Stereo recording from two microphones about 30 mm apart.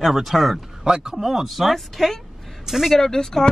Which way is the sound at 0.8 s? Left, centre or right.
Right.